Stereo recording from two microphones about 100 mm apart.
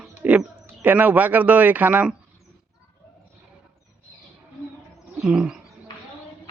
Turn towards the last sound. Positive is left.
turn(degrees=-10)  # may be behind; listen again after turning